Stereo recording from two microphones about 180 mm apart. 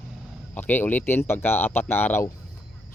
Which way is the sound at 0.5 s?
10° left (ahead or behind).